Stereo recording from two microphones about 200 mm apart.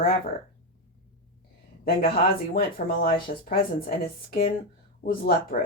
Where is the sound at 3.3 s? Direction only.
40° left (ahead or behind).